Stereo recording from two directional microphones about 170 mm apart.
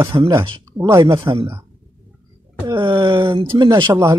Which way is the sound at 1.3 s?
15° right (ahead or behind).